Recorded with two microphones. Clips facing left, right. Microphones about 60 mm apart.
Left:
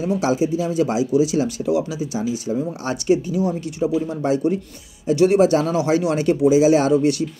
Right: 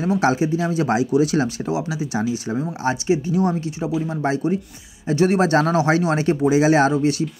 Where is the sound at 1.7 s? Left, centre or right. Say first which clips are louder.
Left 3 dB; right.